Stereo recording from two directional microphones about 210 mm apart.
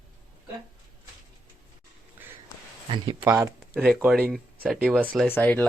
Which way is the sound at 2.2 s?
10° right (ahead or behind).